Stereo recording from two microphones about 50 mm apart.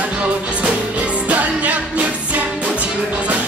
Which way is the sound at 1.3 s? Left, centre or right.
Right.